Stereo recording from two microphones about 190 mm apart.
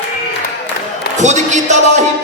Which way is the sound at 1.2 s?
40° right (ahead or behind).